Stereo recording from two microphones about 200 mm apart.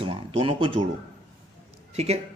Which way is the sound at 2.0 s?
30° right (ahead or behind).